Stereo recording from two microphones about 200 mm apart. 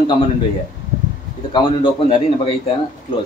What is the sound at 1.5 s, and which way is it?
A man's voice, 25° left (ahead or behind).